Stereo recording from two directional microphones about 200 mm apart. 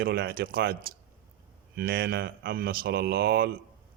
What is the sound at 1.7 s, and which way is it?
Speech, 50° right (ahead or behind).